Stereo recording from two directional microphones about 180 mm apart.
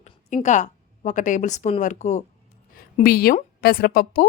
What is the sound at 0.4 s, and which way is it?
A woman's voice, 40° left (ahead or behind).